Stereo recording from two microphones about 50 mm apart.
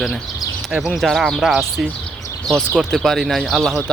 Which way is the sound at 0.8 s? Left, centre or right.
Centre.